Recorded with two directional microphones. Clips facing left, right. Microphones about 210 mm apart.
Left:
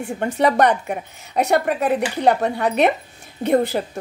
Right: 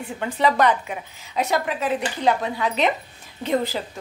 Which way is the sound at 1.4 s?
65° left (ahead or behind).